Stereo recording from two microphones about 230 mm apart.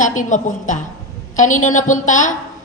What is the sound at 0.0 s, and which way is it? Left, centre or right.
A woman's voice, left.